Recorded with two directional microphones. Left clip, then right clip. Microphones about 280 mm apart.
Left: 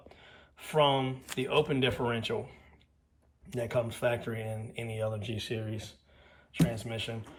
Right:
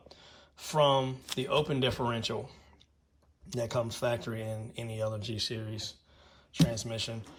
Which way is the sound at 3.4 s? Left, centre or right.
Centre.